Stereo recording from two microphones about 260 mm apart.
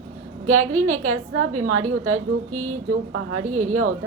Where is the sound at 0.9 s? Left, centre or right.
Right.